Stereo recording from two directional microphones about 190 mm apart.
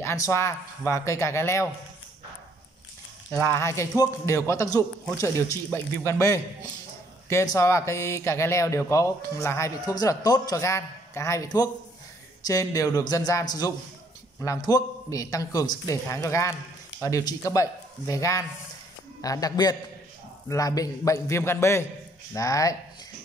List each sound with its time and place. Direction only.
0.0 s speech: 15° left (ahead or behind)
3.3 s speech: 10° left (ahead or behind)